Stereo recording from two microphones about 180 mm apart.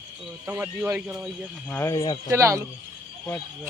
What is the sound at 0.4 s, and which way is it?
Speech, 10° right (ahead or behind).